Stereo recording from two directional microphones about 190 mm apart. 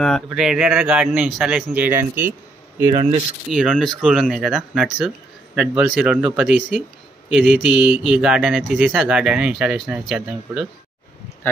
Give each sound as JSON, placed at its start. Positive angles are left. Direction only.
{"t": 0.0, "sound": "speech", "side_deg": 0}
{"t": 2.9, "sound": "speech", "side_deg": -30}
{"t": 3.4, "sound": "speech", "side_deg": 0}